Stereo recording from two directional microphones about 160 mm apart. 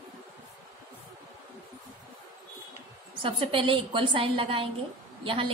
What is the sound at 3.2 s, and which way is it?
A woman's voice, 35° right (ahead or behind).